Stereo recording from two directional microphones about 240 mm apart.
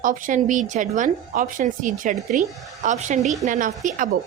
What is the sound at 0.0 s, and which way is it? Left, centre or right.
A woman's voice, right.